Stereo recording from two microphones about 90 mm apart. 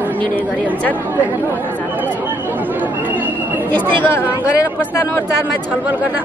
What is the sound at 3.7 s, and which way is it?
Speech, 20° left (ahead or behind).